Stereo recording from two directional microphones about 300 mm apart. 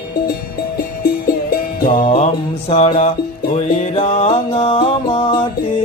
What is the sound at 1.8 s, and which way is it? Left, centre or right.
Music, left.